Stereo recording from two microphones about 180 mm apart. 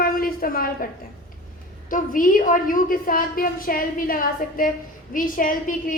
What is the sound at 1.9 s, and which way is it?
A woman's voice, 50° left (ahead or behind).